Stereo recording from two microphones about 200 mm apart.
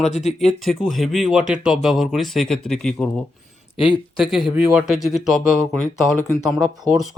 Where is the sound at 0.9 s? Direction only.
Centre (ahead or behind).